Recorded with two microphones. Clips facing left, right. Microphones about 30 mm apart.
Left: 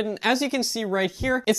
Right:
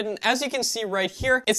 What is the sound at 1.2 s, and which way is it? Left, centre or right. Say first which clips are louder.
Speech: right 5 dB; centre.